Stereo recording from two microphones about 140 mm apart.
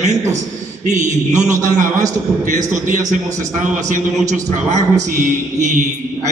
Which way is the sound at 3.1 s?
60° right (ahead or behind).